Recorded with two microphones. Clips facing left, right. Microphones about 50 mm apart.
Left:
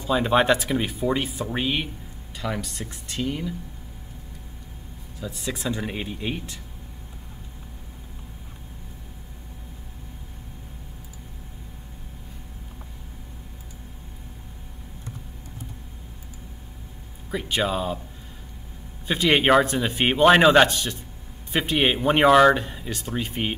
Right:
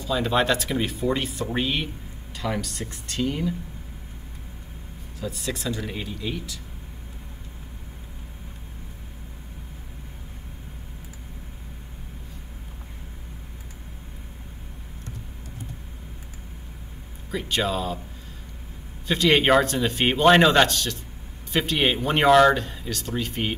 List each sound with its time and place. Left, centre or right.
0.0 s speech: left
0.7 s speech: centre
5.2 s speech: centre
5.5 s speech: centre
5.8 s speech: left
17.3 s speech: centre
19.0 s speech: centre